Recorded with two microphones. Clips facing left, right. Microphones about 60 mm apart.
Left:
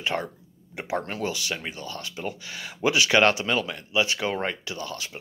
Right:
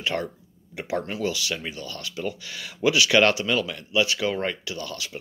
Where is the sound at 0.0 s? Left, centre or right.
Left.